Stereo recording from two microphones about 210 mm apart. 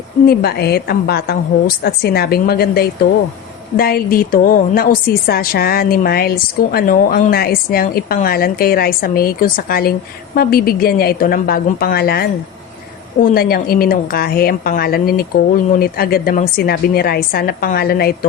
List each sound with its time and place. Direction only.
0.3 s a woman's voice: 50° left (ahead or behind)